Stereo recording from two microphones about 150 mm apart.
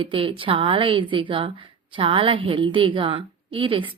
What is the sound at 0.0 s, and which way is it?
Speech, 35° right (ahead or behind).